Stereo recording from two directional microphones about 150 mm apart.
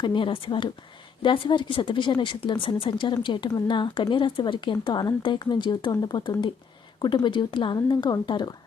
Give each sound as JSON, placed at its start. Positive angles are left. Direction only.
{"t": 0.0, "sound": "a woman's voice", "side_deg": 30}